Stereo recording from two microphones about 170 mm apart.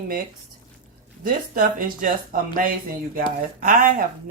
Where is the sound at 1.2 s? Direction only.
55° right (ahead or behind).